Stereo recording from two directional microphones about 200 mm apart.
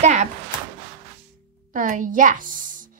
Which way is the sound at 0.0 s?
35° right (ahead or behind).